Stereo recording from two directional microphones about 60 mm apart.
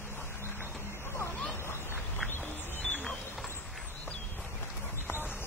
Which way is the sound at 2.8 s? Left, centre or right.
Centre.